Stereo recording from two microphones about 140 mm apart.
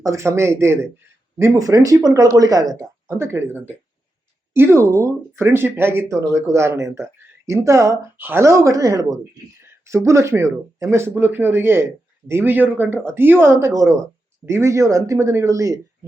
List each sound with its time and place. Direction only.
0.0 s a man's voice: 20° right (ahead or behind)